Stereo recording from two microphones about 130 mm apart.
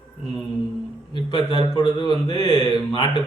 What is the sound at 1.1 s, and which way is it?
A man's voice, 40° left (ahead or behind).